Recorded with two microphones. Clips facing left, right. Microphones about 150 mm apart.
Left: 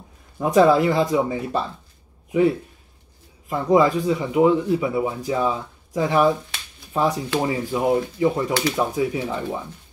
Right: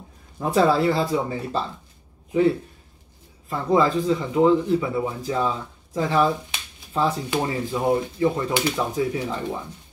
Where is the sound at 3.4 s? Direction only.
15° left (ahead or behind).